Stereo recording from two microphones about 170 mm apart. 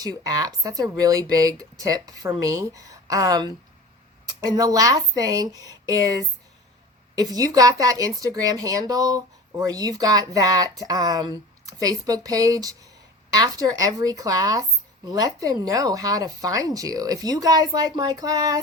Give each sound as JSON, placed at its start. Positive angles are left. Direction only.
{"t": 0.3, "sound": "speech", "side_deg": -20}